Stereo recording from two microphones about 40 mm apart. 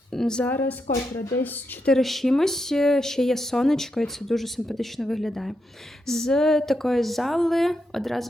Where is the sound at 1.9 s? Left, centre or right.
Centre.